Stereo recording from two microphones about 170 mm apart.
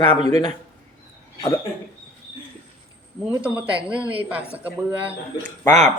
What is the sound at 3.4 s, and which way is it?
A woman's voice, 5° right (ahead or behind).